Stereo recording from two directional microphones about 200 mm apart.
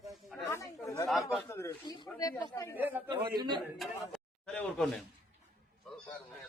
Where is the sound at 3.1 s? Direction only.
20° right (ahead or behind).